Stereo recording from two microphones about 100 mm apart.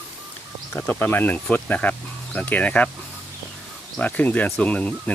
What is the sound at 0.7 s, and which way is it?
Speech, 20° left (ahead or behind).